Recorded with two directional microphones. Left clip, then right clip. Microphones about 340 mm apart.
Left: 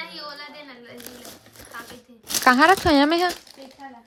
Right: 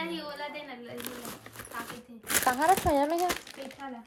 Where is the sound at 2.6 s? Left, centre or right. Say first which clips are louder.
Left 6 dB; left.